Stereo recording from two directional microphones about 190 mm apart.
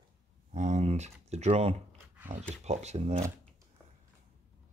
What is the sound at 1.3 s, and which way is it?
Speech, 35° right (ahead or behind).